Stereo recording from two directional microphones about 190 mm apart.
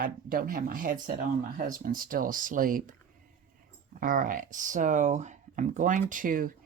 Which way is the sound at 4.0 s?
45° right (ahead or behind).